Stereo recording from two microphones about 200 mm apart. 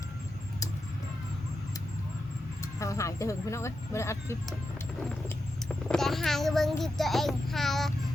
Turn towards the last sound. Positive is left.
turn(degrees=0)  # may be behind; listen again after turning